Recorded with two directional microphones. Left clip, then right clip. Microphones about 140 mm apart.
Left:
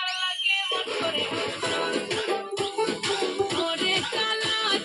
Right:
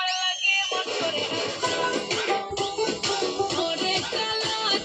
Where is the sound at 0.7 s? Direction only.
50° left (ahead or behind).